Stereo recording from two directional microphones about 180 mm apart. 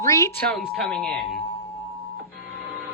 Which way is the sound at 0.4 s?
5° left (ahead or behind).